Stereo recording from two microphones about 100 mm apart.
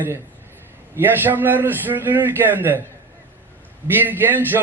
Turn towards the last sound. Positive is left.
turn(degrees=-20)  # may be behind; listen again after turning